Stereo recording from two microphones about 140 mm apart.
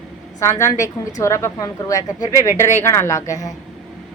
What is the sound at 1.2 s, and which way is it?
A woman's voice, 20° left (ahead or behind).